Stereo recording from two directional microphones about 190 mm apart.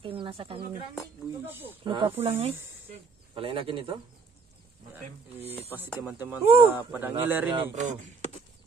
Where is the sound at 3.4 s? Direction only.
30° right (ahead or behind).